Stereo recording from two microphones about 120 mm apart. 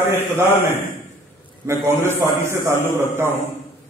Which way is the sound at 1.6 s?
20° right (ahead or behind).